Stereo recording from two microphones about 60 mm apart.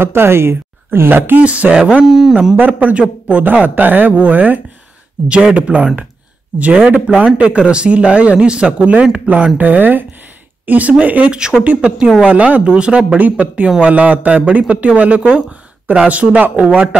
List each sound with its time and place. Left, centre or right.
0.0 s speech: right
1.4 s speech: right
2.5 s speech: right
9.6 s speech: right